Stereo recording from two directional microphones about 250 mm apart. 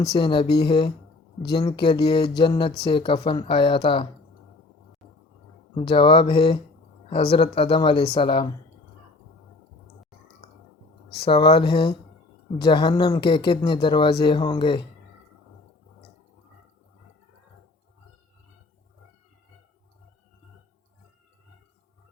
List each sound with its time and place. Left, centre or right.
0.2 s speech: centre
5.7 s speech: left
11.3 s speech: left